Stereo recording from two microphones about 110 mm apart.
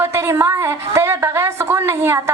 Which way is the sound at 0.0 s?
25° right (ahead or behind).